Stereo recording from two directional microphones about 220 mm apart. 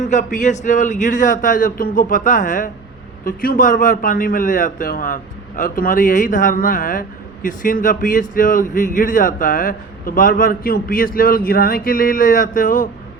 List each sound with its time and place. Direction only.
0.0 s speech: 35° left (ahead or behind)